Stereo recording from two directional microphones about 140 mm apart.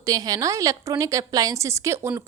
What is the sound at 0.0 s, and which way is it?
A woman's voice, 25° right (ahead or behind).